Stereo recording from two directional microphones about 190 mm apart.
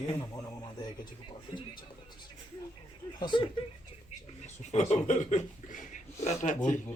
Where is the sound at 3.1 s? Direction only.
25° left (ahead or behind).